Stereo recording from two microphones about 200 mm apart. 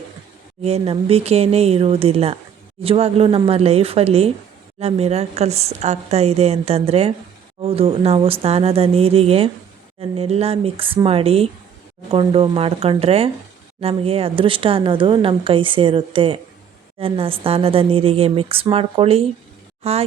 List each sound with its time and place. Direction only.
0.6 s a woman's voice: 30° right (ahead or behind)